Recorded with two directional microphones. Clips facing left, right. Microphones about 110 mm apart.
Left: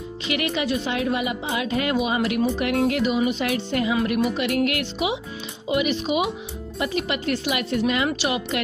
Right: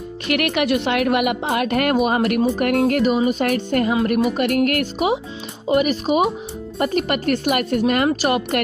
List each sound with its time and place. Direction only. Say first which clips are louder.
0.3 s a woman's voice: right 5 dB; 65° right (ahead or behind)
3.9 s a woman's voice: right 2 dB; 40° right (ahead or behind); by 8.5 s 55° right (ahead or behind)